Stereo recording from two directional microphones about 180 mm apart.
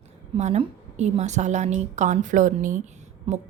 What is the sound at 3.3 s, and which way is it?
Speech, 30° right (ahead or behind).